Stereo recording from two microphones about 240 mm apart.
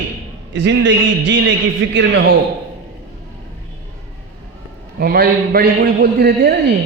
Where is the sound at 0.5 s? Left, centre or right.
Right.